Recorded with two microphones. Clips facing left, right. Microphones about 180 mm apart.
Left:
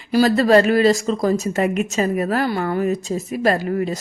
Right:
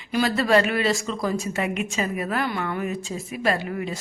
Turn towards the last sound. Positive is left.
turn(degrees=40)  # may be behind; listen again after turning